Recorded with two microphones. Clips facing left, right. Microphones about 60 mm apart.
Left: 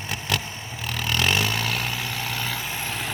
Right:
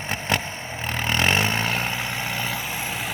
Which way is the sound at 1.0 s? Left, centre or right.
Right.